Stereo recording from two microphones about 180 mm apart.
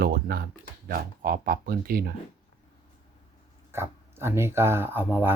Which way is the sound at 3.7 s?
15° right (ahead or behind).